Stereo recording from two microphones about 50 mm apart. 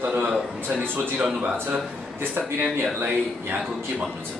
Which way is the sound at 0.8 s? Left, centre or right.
Right.